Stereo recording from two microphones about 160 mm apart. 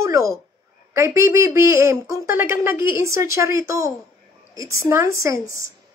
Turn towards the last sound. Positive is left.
turn(degrees=-20)  # may be behind; listen again after turning